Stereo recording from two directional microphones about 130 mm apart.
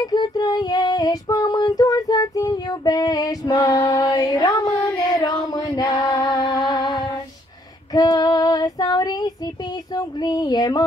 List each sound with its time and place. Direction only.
0.0 s child singing: 30° left (ahead or behind)
3.9 s music: 30° left (ahead or behind)
5.5 s a sound: 30° left (ahead or behind)
6.7 s music: 30° left (ahead or behind)
7.9 s female singing: 30° left (ahead or behind)
9.9 s speech: 30° left (ahead or behind)